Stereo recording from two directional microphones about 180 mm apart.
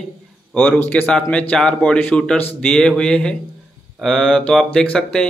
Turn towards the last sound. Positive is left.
turn(degrees=5)  # may be behind; listen again after turning